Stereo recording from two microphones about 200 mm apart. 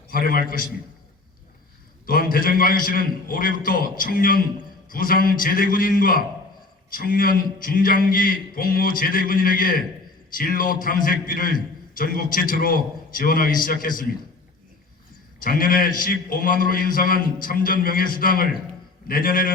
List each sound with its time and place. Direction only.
0.1 s a man's voice: 45° left (ahead or behind)
2.0 s a man's voice: 45° left (ahead or behind)
15.4 s a man's voice: 45° left (ahead or behind)